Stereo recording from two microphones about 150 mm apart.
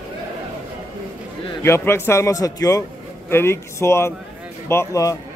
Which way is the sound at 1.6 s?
15° left (ahead or behind).